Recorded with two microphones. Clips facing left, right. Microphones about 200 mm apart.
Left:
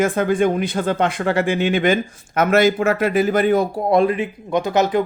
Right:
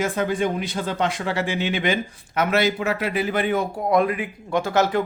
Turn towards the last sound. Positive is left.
turn(degrees=20)  # may be behind; listen again after turning